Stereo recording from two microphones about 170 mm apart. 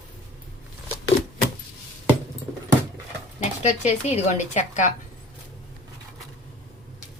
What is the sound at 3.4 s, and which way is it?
A woman's voice, 40° left (ahead or behind).